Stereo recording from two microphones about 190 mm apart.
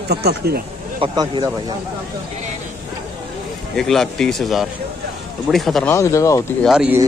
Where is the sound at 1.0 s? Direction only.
25° right (ahead or behind).